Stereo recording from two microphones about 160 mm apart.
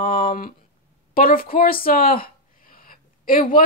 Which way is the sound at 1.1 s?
65° left (ahead or behind).